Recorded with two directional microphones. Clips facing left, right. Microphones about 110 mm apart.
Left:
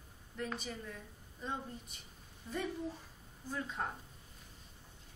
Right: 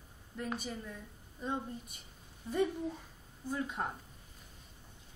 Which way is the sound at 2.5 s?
15° right (ahead or behind).